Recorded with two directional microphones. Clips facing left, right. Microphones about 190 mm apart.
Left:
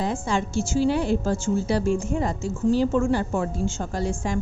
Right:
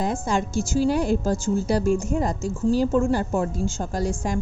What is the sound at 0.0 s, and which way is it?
A woman's voice, 45° right (ahead or behind).